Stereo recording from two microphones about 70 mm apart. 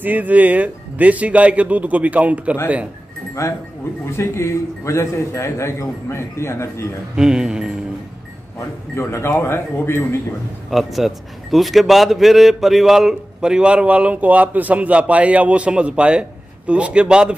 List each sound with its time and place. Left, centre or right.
0.0 s speech: right
3.4 s a man's voice: left
7.2 s a man's voice: centre
9.0 s a man's voice: left
10.7 s a man's voice: centre